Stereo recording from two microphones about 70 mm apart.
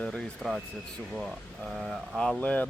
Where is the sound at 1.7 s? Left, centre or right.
Centre.